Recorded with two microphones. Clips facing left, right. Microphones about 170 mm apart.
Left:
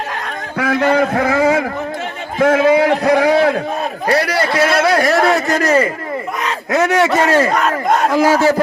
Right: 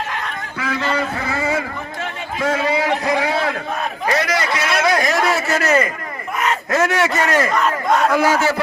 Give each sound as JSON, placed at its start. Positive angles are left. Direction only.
{"t": 0.6, "sound": "a man's voice", "side_deg": 60}
{"t": 4.4, "sound": "a man's voice", "side_deg": 35}
{"t": 4.8, "sound": "a man's voice", "side_deg": 55}
{"t": 5.0, "sound": "a man's voice", "side_deg": 40}
{"t": 6.7, "sound": "speech", "side_deg": 20}
{"t": 7.5, "sound": "battle cry", "side_deg": 55}
{"t": 8.1, "sound": "a man's voice", "side_deg": 35}